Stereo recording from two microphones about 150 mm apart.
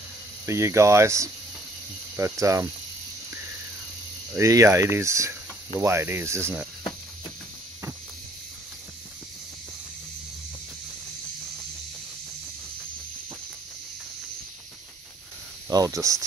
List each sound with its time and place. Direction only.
0.5 s speech: 20° right (ahead or behind)
4.4 s speech: 20° right (ahead or behind)
15.7 s speech: 20° right (ahead or behind)